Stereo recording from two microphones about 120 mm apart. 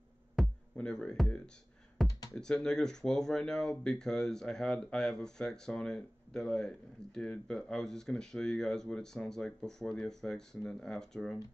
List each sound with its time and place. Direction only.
0.4 s music: 5° left (ahead or behind)
2.0 s computer keyboard: 30° left (ahead or behind)
2.3 s speech: 5° left (ahead or behind)